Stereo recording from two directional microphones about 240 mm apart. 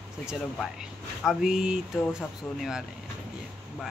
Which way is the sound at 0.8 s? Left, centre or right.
Centre.